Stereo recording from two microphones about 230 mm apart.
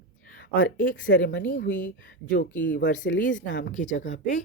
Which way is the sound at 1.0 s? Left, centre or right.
Left.